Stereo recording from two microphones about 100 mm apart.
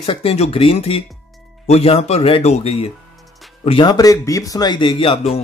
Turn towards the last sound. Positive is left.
turn(degrees=70)  # may be behind; listen again after turning